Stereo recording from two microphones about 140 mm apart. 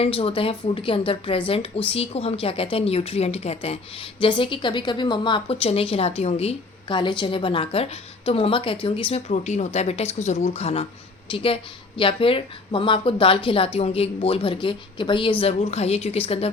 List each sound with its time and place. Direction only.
0.0 s speech: 45° left (ahead or behind)
9.3 s speech: 55° left (ahead or behind)